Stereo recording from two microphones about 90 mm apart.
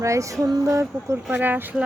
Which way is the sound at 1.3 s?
20° right (ahead or behind).